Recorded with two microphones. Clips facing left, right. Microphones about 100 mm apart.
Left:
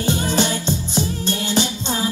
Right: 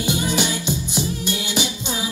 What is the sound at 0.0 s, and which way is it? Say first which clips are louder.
Music: left 2 dB; 15° right (ahead or behind).